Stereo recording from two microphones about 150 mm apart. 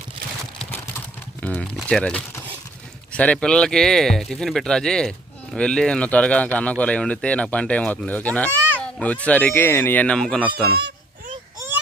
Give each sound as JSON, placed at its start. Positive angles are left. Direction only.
{"t": 1.4, "sound": "speech", "side_deg": 10}
{"t": 10.5, "sound": "speech", "side_deg": -90}